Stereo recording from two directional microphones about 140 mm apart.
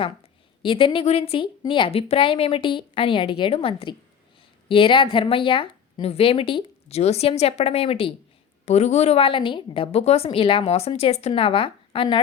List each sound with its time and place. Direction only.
0.0 s a woman's voice: 40° left (ahead or behind)